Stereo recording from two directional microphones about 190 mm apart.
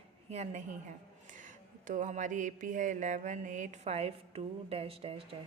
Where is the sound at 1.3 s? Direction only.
45° right (ahead or behind).